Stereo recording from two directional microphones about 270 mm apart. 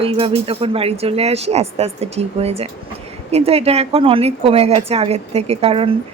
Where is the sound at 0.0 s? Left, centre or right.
Right.